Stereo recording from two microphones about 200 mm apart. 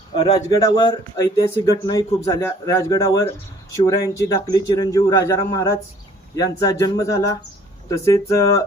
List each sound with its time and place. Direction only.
0.1 s a man's voice: 20° left (ahead or behind)